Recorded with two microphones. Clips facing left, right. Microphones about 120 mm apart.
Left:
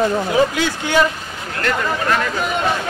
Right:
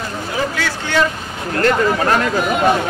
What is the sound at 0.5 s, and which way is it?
Speech, 15° left (ahead or behind).